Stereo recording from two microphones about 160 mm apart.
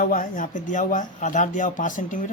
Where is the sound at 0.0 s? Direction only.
60° left (ahead or behind).